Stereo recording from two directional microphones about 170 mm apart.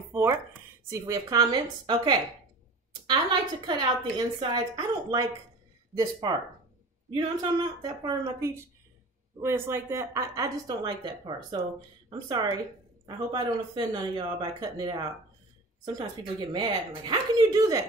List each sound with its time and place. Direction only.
0.1 s speech: 15° right (ahead or behind)
7.2 s a woman's voice: 25° right (ahead or behind)